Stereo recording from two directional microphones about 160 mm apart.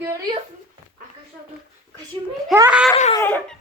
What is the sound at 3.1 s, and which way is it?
Speech, 10° left (ahead or behind).